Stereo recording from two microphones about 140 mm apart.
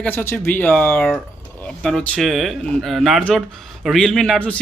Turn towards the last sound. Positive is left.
turn(degrees=5)  # may be behind; listen again after turning